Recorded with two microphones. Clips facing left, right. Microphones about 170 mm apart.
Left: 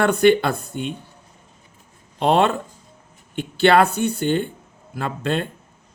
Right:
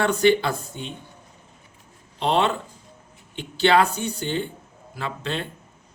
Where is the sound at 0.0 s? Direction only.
55° left (ahead or behind).